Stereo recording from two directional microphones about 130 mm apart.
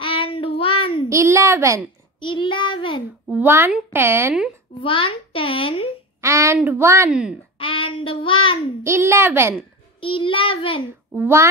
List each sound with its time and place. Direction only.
0.0 s child singing: 45° left (ahead or behind)
1.0 s a woman's voice: 20° right (ahead or behind)
2.1 s child singing: 40° left (ahead or behind)
3.3 s a child's voice: 15° right (ahead or behind)
4.8 s child singing: 45° left (ahead or behind)
6.2 s a woman's voice: 20° right (ahead or behind)
7.1 s a child's voice: 5° right (ahead or behind)
7.5 s child singing: 45° left (ahead or behind)
8.8 s a woman's voice: 20° right (ahead or behind)
9.9 s child singing: 40° left (ahead or behind)
11.1 s a child's voice: 20° right (ahead or behind)